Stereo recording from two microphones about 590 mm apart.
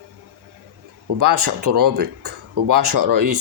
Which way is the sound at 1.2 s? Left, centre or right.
Right.